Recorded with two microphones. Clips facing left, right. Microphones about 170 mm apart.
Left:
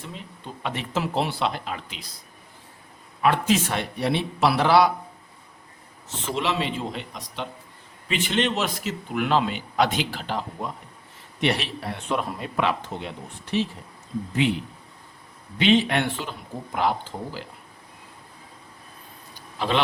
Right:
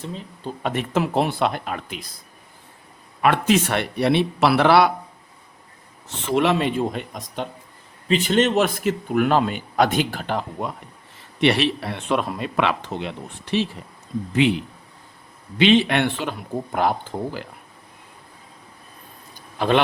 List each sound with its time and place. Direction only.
0.1 s speech: 35° right (ahead or behind)
0.7 s speech: 55° right (ahead or behind)
3.2 s speech: 65° right (ahead or behind)
6.1 s speech: 60° right (ahead or behind)
11.3 s a man's voice: 75° right (ahead or behind)
16.7 s speech: 50° right (ahead or behind)
19.5 s speech: 55° right (ahead or behind)